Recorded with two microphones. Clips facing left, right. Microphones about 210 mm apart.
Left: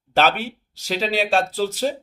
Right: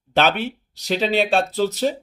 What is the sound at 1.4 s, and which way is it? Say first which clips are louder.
Speech: right 2 dB; 45° left (ahead or behind).